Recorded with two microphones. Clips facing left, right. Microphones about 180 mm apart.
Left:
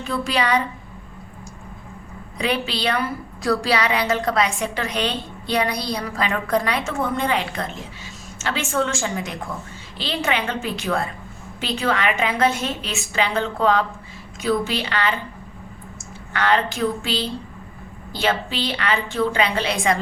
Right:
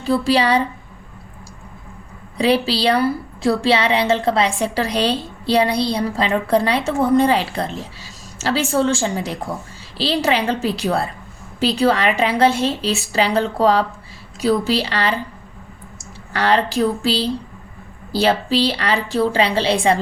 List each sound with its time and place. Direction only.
0.0 s a woman's voice: 30° right (ahead or behind)
2.4 s a woman's voice: 35° right (ahead or behind)
16.3 s a woman's voice: 35° right (ahead or behind)